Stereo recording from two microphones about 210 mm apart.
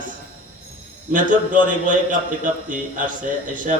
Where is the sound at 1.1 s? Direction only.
40° right (ahead or behind).